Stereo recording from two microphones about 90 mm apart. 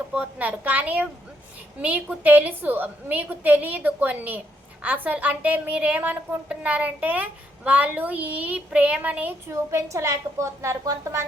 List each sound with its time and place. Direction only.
0.1 s a woman's voice: 15° right (ahead or behind)
9.5 s a woman's voice: 35° right (ahead or behind)